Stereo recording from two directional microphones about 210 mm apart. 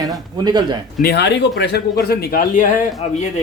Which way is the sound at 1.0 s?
55° left (ahead or behind).